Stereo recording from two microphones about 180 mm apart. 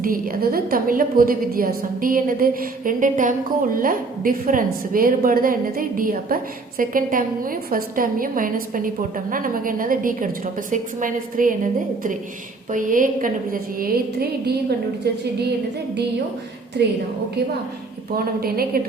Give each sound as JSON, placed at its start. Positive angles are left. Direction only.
{"t": 0.0, "sound": "a woman's voice", "side_deg": -55}
{"t": 16.8, "sound": "a woman's voice", "side_deg": -65}
{"t": 18.1, "sound": "a woman's voice", "side_deg": -55}